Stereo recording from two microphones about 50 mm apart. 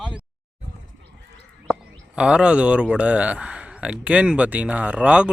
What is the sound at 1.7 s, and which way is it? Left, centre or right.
Speech, centre.